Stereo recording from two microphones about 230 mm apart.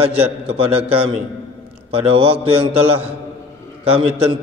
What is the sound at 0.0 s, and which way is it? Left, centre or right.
A man's voice, right.